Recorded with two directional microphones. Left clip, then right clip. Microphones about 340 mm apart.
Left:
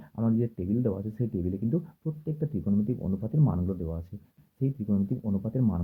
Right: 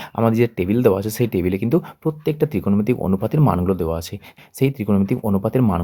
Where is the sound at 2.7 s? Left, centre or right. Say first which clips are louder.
Right 12 dB; right.